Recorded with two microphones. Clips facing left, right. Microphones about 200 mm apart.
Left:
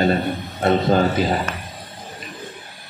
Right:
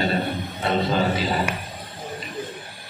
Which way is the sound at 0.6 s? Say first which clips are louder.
Left 7 dB; 50° left (ahead or behind).